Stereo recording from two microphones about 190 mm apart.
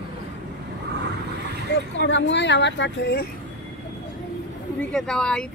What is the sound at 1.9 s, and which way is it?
Speech, 70° left (ahead or behind).